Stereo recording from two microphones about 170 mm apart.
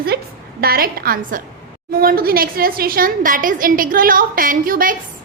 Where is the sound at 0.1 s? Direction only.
70° right (ahead or behind).